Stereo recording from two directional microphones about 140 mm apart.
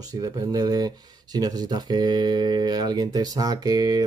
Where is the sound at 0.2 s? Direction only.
25° right (ahead or behind).